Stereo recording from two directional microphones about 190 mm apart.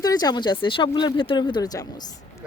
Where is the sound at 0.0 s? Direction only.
20° left (ahead or behind).